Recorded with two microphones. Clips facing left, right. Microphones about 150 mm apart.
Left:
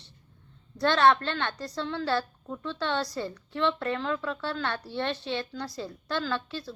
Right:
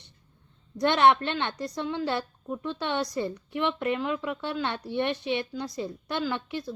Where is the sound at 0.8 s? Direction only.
20° right (ahead or behind).